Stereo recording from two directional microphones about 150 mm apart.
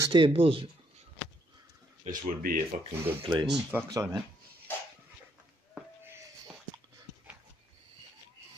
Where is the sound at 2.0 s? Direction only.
50° right (ahead or behind).